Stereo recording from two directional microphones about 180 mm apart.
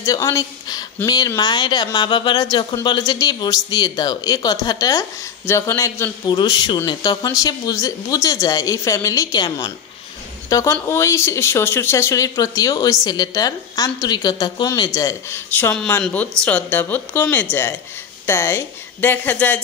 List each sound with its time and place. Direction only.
0.0 s a man's voice: 20° left (ahead or behind)
15.7 s speech: 5° left (ahead or behind)